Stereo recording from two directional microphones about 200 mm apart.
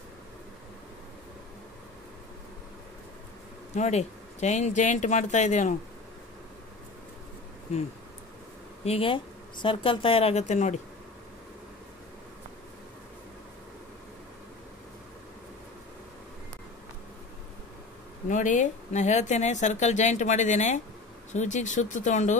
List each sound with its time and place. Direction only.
3.7 s speech: 35° left (ahead or behind)
8.8 s speech: 30° left (ahead or behind)
18.3 s speech: 40° left (ahead or behind)